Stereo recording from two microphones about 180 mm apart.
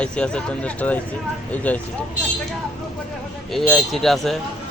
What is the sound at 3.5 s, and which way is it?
Speech, centre (ahead or behind).